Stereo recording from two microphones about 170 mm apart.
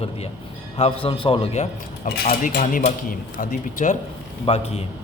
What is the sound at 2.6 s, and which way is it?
Speech, 50° left (ahead or behind).